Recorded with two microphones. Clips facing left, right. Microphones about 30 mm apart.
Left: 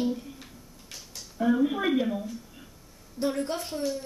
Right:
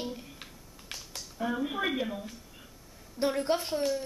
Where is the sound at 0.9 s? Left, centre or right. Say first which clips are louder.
Right 3 dB; right.